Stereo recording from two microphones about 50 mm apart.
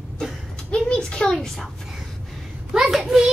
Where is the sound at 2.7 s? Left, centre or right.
Centre.